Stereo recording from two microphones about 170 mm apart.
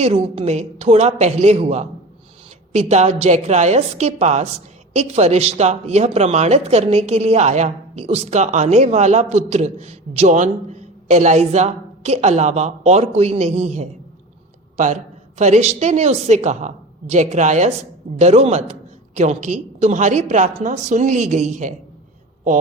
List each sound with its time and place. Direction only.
0.0 s a woman's voice: 40° right (ahead or behind)